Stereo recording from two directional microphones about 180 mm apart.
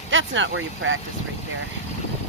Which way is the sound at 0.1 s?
90° right.